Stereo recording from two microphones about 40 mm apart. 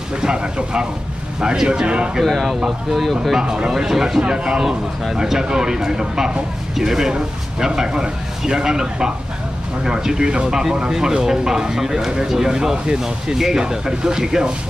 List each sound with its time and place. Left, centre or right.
0.2 s speech: right
2.2 s speech: centre
3.3 s speech: centre
4.2 s speech: centre